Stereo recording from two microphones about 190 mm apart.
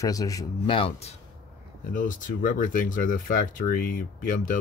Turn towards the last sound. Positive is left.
turn(degrees=45)  # may be behind; listen again after turning